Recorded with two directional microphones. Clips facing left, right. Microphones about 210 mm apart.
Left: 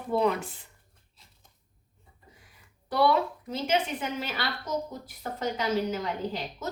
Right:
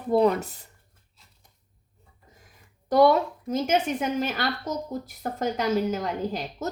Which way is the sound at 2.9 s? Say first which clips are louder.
Right 6 dB; 45° right (ahead or behind).